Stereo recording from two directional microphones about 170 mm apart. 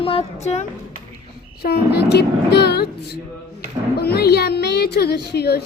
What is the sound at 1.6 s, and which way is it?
A woman's voice, 70° left (ahead or behind).